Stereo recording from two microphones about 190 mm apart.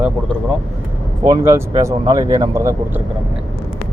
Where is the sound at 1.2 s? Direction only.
15° right (ahead or behind).